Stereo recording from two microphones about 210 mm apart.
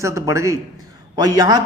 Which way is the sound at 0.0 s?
15° right (ahead or behind).